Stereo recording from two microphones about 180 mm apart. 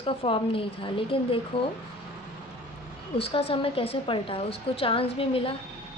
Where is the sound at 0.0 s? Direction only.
30° left (ahead or behind).